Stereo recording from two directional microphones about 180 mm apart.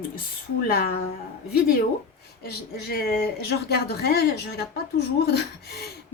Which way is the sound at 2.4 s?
60° left (ahead or behind).